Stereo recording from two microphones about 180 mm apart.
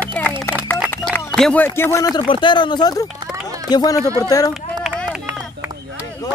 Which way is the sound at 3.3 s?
20° right (ahead or behind).